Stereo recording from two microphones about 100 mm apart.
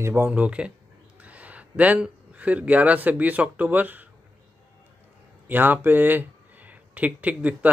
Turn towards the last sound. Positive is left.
turn(degrees=-15)  # may be behind; listen again after turning